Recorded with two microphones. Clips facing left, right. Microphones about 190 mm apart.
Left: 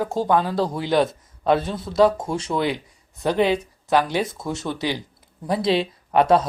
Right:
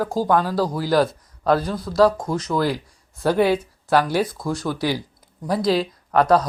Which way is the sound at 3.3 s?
10° right (ahead or behind).